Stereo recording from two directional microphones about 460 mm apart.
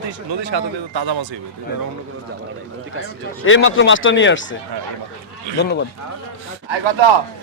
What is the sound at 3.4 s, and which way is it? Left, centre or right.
Speech, left.